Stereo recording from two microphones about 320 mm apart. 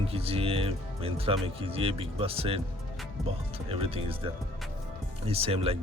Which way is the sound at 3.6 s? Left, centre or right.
Centre.